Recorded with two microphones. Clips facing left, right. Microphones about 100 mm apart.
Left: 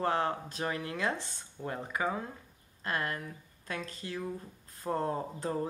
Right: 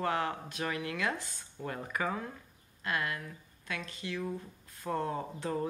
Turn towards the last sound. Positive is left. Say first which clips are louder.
# left 1 dB
turn(degrees=35)  # may be behind; listen again after turning